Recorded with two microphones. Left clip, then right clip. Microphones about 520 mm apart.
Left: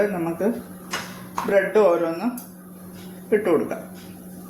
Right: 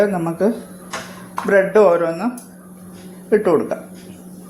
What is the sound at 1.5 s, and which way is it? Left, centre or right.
Speech, left.